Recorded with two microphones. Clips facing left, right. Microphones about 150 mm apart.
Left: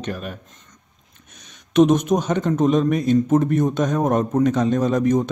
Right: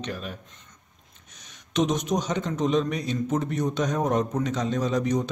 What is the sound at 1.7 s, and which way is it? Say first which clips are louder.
Speech: left 9 dB; 55° left (ahead or behind).